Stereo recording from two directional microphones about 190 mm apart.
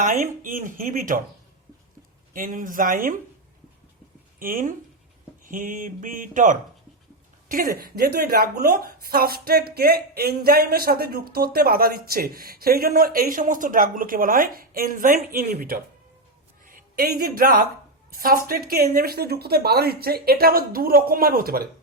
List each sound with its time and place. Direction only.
0.0 s speech: 40° right (ahead or behind)
2.3 s speech: 45° right (ahead or behind)
4.4 s speech: 45° right (ahead or behind)
7.4 s a sound: 45° right (ahead or behind)
7.8 s a woman's voice: 55° right (ahead or behind)